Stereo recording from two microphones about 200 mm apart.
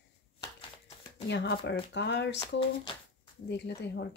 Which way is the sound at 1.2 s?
60° left (ahead or behind).